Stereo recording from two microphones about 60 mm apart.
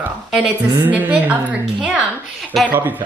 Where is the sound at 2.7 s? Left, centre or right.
Right.